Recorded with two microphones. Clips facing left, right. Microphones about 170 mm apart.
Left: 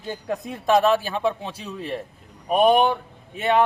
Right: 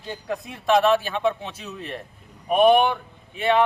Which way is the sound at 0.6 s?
40° left (ahead or behind).